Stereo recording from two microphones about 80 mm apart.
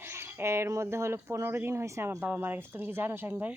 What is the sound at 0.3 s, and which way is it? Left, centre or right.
Speech, right.